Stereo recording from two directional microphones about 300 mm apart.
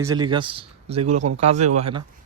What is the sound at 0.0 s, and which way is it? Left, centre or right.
A man's voice, centre.